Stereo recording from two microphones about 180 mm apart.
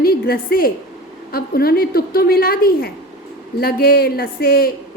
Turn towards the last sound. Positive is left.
turn(degrees=55)  # may be behind; listen again after turning